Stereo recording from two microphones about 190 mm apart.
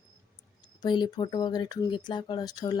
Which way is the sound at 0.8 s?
25° left (ahead or behind).